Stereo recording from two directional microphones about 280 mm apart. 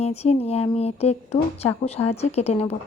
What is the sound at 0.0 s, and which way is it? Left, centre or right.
Speech, left.